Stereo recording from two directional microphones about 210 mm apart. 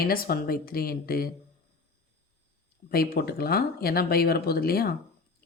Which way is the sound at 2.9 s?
50° left (ahead or behind).